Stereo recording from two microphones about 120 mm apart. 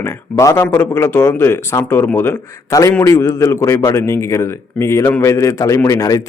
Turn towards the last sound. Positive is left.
turn(degrees=30)  # may be behind; listen again after turning